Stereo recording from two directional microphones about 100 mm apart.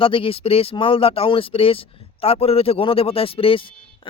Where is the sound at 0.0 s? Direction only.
65° left (ahead or behind).